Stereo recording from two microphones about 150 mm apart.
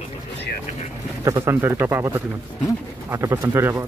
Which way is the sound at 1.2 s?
20° right (ahead or behind).